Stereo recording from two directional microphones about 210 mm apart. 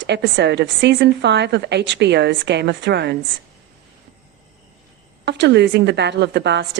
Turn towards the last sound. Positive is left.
turn(degrees=-55)  # may be behind; listen again after turning